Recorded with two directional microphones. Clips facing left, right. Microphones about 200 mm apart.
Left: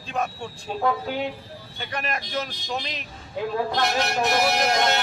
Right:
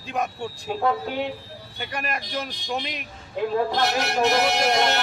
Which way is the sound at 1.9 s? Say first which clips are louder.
Left 1 dB; 10° right (ahead or behind).